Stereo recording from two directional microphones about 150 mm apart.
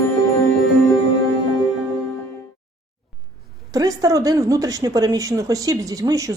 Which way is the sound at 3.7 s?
25° right (ahead or behind).